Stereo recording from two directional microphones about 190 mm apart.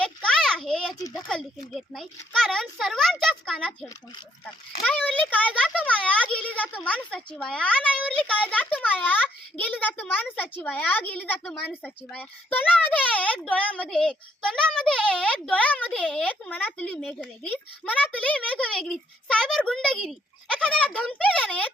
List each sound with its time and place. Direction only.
0.0 s a sound: 5° left (ahead or behind)
0.9 s speech: 15° left (ahead or behind)
1.3 s a child's voice: centre (ahead or behind)